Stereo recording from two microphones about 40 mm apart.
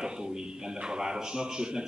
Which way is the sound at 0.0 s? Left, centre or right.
Centre.